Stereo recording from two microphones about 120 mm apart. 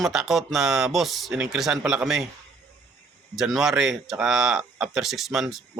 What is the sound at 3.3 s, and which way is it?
Speech, centre (ahead or behind).